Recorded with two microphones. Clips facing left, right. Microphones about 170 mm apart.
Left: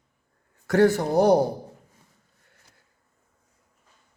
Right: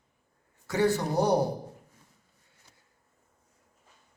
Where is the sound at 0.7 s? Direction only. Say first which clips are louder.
Left 7 dB; 90° left.